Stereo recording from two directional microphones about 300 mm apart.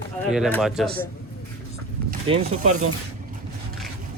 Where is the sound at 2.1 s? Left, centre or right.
Centre.